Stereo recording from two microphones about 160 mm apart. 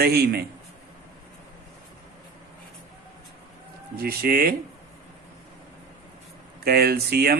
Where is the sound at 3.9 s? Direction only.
70° right (ahead or behind).